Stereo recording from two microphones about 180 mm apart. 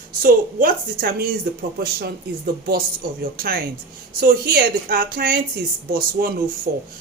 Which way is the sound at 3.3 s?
55° right (ahead or behind).